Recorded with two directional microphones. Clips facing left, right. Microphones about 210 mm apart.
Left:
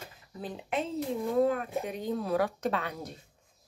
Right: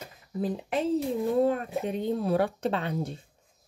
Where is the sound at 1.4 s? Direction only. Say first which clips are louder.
Right 2 dB; 25° right (ahead or behind).